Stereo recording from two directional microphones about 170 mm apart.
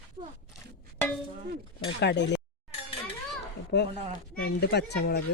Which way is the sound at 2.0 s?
85° left.